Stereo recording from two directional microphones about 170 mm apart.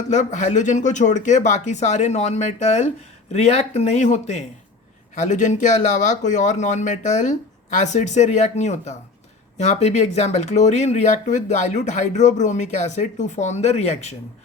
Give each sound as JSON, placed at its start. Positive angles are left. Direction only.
{"t": 0.1, "sound": "speech", "side_deg": 45}